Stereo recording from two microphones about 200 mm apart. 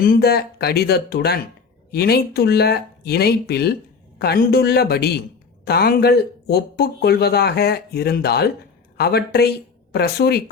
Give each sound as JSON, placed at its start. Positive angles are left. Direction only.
{"t": 0.0, "sound": "speech", "side_deg": 50}